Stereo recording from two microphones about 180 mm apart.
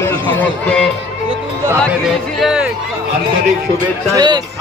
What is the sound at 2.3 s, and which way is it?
Speech, 5° right (ahead or behind).